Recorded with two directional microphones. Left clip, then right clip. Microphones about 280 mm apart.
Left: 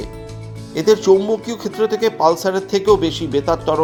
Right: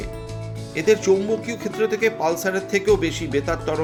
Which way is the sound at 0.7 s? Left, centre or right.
Centre.